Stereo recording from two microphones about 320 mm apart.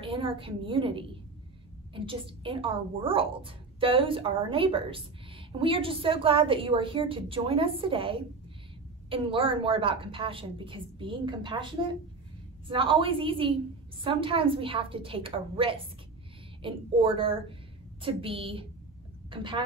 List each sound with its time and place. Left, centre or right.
0.0 s a woman's voice: centre